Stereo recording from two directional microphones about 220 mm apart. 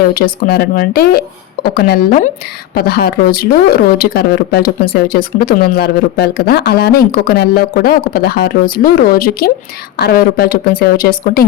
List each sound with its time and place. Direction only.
0.1 s speech: 40° left (ahead or behind)